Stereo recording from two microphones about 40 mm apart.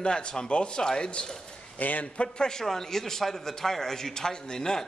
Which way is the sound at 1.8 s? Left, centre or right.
Left.